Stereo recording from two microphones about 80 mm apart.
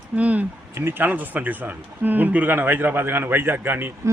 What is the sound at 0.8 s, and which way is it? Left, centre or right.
A man's voice, right.